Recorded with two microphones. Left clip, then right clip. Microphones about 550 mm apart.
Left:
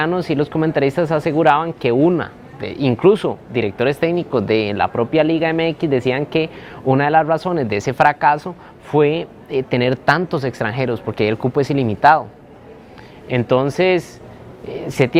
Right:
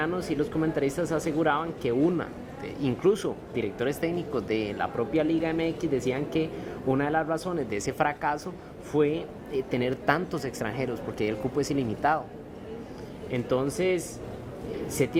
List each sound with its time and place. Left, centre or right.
0.0 s speech: left
13.3 s speech: left